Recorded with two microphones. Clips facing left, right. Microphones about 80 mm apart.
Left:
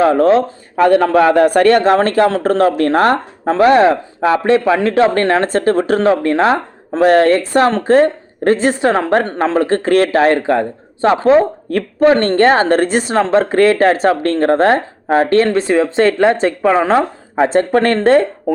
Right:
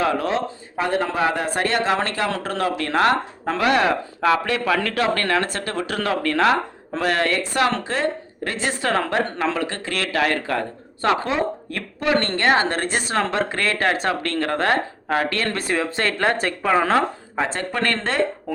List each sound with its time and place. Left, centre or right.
0.0 s speech: left
0.9 s a man's voice: left
8.8 s speech: left
9.1 s a man's voice: left
11.3 s a man's voice: left
15.4 s speech: left
17.4 s a man's voice: left